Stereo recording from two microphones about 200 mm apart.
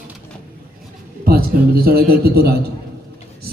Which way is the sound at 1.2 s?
45° right (ahead or behind).